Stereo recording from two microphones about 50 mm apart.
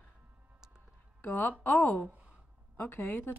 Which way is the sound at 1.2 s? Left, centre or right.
Left.